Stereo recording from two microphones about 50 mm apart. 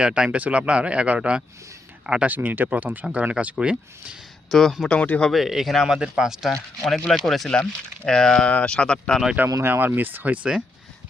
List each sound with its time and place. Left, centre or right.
0.0 s speech: centre
0.3 s speech: right
4.5 s speech: centre
4.9 s speech: left
5.3 s speech: centre
6.5 s speech: centre
9.6 s speech: right